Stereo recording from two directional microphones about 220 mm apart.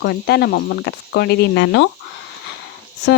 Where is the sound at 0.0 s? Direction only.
45° left (ahead or behind).